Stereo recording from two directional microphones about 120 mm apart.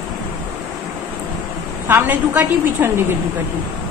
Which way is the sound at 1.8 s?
15° right (ahead or behind).